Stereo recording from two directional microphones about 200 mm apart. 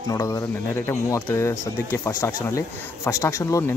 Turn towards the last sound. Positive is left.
turn(degrees=15)  # may be behind; listen again after turning